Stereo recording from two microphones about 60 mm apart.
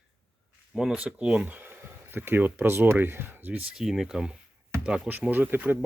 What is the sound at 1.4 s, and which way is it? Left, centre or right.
Speech, right.